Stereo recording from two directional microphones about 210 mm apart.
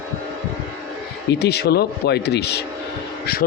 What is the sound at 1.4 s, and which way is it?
Speech, 50° left (ahead or behind).